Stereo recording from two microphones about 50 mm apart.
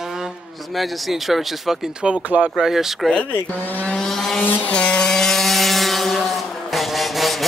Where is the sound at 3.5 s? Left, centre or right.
Left.